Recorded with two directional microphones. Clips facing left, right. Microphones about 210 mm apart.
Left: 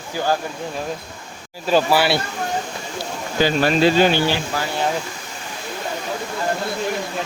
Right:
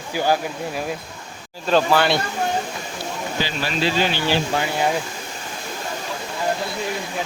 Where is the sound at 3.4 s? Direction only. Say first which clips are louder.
Left 9 dB; 50° left (ahead or behind).